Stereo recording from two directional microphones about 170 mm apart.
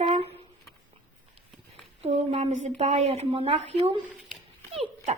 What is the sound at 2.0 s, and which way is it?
A woman's voice, 35° right (ahead or behind).